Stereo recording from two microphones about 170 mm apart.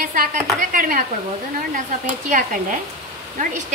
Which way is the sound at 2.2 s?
50° right (ahead or behind).